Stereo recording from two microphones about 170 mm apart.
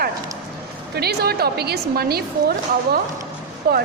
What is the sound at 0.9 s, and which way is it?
A woman's voice, 70° right (ahead or behind).